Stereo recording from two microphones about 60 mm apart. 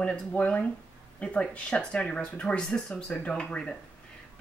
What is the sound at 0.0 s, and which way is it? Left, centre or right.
Speech, left.